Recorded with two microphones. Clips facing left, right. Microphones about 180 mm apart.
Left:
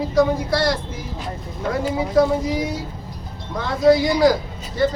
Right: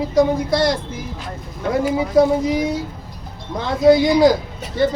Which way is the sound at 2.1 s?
20° right (ahead or behind).